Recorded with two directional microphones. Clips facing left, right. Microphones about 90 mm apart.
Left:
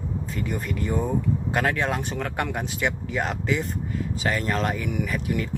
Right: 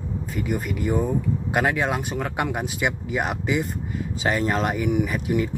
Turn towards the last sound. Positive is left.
turn(degrees=-20)  # may be behind; listen again after turning